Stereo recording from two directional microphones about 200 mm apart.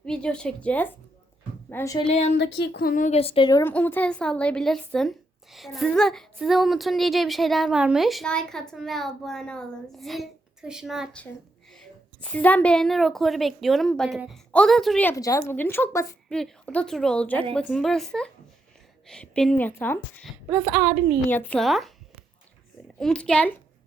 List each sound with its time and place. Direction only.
0.0 s a woman's voice: 5° left (ahead or behind)
2.0 s speech: 35° left (ahead or behind)
2.4 s speech: 55° left (ahead or behind); by 3.6 s 25° left (ahead or behind)
3.6 s a woman's voice: 10° left (ahead or behind)
20.5 s a woman's voice: 5° right (ahead or behind)
21.2 s a woman's voice: 10° left (ahead or behind)
23.0 s a woman's voice: 5° left (ahead or behind)